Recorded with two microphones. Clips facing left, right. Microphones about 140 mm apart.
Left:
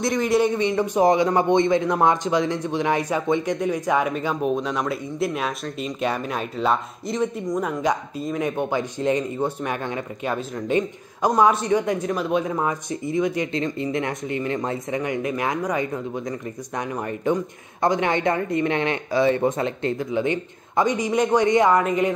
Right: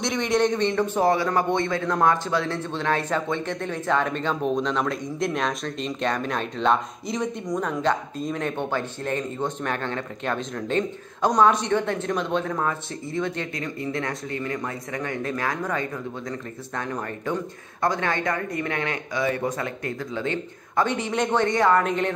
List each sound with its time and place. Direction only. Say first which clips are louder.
0.0 s a man's voice: left 3 dB; centre (ahead or behind); by 21.8 s 20° left (ahead or behind)
21.8 s a man's voice: left 3 dB; 5° left (ahead or behind)